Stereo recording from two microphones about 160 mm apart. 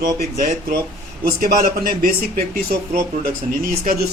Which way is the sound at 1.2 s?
60° right (ahead or behind).